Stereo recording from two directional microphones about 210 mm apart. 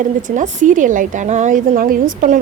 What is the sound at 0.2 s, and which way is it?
Speech, 40° right (ahead or behind).